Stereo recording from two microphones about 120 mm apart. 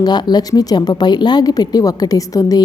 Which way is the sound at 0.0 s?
35° left (ahead or behind).